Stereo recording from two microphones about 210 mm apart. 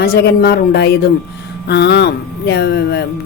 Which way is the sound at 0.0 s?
50° left (ahead or behind).